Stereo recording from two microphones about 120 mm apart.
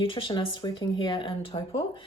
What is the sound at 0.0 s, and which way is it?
Speech, 45° left (ahead or behind).